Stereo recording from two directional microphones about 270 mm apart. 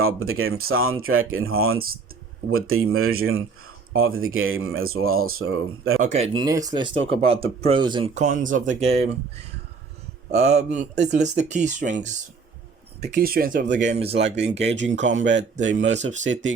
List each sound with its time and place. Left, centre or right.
0.0 s speech: right
6.0 s speech: right
13.9 s speech: right
14.2 s speech: right